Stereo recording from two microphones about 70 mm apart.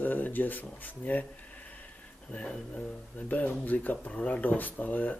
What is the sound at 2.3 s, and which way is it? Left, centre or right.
Speech, centre.